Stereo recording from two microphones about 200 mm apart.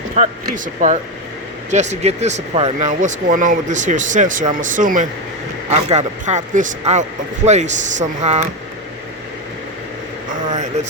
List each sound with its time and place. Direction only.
0.2 s speech: 35° right (ahead or behind)
10.5 s speech: 35° right (ahead or behind)